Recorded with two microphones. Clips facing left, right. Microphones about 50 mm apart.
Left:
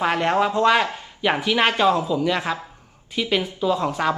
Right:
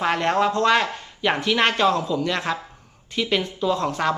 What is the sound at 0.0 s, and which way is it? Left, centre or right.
Speech, centre.